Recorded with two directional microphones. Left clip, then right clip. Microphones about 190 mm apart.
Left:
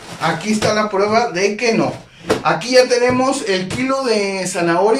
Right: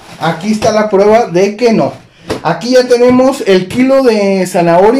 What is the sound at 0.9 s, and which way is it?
Speech, 40° right (ahead or behind).